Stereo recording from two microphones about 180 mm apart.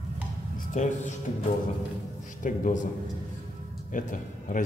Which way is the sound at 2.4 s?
45° left (ahead or behind).